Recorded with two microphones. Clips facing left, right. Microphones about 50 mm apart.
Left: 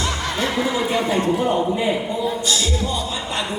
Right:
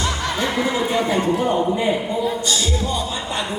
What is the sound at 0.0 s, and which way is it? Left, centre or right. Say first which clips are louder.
Music: right 1 dB; centre.